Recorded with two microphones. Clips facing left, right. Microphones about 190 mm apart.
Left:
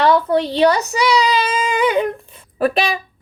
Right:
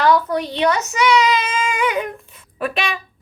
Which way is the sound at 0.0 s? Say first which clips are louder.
Left 2 dB; 30° left (ahead or behind).